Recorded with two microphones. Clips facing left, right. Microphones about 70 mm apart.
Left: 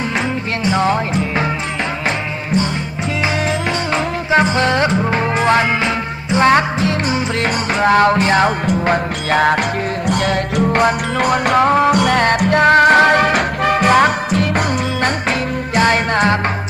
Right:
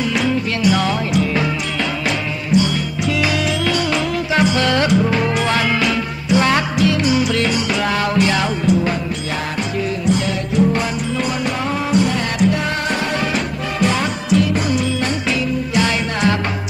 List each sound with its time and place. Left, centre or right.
0.7 s music: left
3.3 s music: left